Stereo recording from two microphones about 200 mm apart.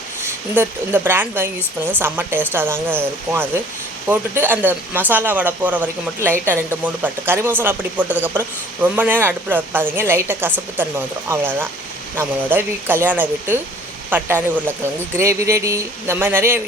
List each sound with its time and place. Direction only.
0.5 s speech: 10° right (ahead or behind)